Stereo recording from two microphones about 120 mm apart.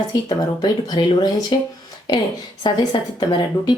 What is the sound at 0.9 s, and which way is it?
A woman's voice, 35° left (ahead or behind).